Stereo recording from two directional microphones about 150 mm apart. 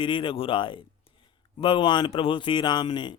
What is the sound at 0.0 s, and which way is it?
Speech, 35° left (ahead or behind).